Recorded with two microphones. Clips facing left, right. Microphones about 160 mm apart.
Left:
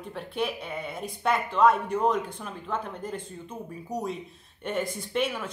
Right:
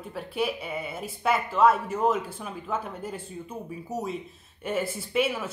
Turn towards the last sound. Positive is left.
turn(degrees=-5)  # may be behind; listen again after turning